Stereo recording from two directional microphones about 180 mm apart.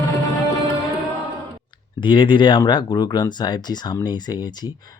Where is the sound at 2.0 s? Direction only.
25° left (ahead or behind).